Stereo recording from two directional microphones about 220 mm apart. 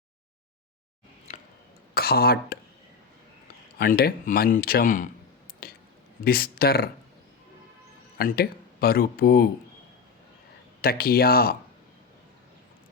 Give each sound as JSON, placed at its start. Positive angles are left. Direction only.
{"t": 1.3, "sound": "a sound", "side_deg": 30}
{"t": 2.0, "sound": "speech", "side_deg": 45}
{"t": 3.8, "sound": "speech", "side_deg": 45}
{"t": 5.6, "sound": "a sound", "side_deg": 40}
{"t": 6.2, "sound": "speech", "side_deg": 45}
{"t": 8.2, "sound": "speech", "side_deg": 40}
{"t": 10.8, "sound": "speech", "side_deg": 45}